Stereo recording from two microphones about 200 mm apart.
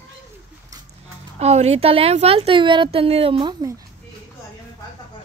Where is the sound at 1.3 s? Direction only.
35° right (ahead or behind).